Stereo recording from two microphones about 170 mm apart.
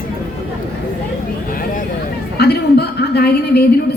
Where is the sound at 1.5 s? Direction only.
55° left (ahead or behind).